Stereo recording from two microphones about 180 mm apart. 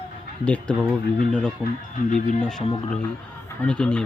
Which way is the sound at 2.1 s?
45° left (ahead or behind).